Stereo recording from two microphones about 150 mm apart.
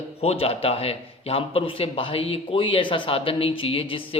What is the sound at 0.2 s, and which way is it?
Speech, 40° left (ahead or behind).